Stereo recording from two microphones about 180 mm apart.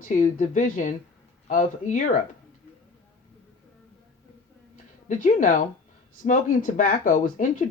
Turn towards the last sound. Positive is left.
turn(degrees=45)  # may be behind; listen again after turning